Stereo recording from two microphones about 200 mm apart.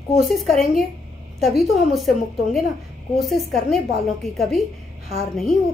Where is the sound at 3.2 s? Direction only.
Centre (ahead or behind).